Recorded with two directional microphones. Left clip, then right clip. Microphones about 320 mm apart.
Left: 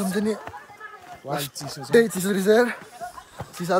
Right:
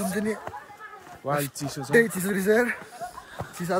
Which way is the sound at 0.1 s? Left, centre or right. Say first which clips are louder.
Left 3 dB; centre.